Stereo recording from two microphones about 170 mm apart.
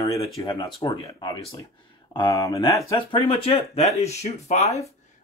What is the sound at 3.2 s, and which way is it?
Speech, 35° left (ahead or behind).